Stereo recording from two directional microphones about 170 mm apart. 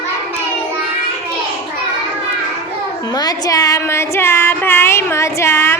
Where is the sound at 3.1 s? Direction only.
20° left (ahead or behind).